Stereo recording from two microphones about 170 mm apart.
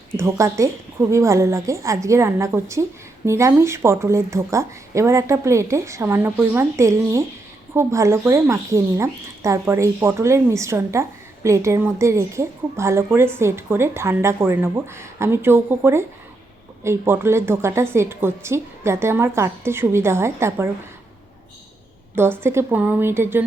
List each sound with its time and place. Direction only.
0.2 s a woman's voice: 15° right (ahead or behind)
22.1 s a woman's voice: 15° right (ahead or behind)